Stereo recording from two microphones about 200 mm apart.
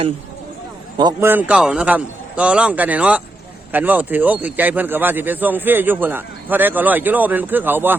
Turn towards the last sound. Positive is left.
turn(degrees=-10)  # may be behind; listen again after turning